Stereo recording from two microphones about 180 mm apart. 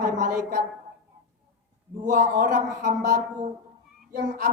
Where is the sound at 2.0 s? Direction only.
45° right (ahead or behind).